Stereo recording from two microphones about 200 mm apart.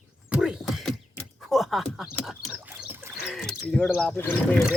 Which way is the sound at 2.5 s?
10° right (ahead or behind).